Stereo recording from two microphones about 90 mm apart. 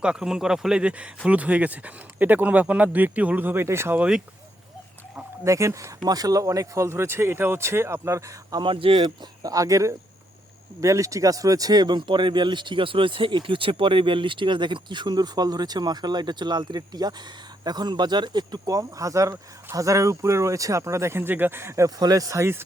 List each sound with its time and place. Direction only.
0.0 s speech: 10° right (ahead or behind); by 4.0 s 30° right (ahead or behind)
5.5 s speech: 35° right (ahead or behind)
8.6 s speech: 75° right (ahead or behind)
9.4 s speech: 40° right (ahead or behind)
21.8 s speech: 45° right (ahead or behind)